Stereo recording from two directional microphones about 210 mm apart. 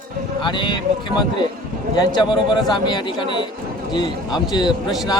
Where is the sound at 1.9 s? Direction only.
20° left (ahead or behind).